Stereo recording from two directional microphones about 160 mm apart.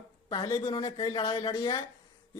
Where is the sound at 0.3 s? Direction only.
25° left (ahead or behind).